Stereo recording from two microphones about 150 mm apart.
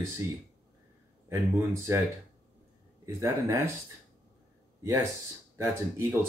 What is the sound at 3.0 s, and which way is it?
Speech, 20° right (ahead or behind).